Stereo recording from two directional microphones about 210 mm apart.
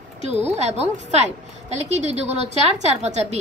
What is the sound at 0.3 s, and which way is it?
A woman's voice, 30° right (ahead or behind).